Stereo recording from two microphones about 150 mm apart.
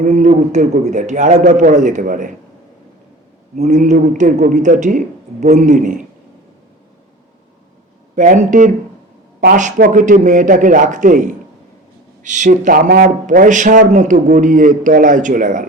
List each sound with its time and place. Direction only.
0.0 s speech: 55° right (ahead or behind)
3.5 s speech: 55° right (ahead or behind)
8.1 s speech: 55° right (ahead or behind)